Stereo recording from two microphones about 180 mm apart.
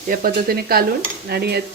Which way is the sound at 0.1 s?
55° right (ahead or behind).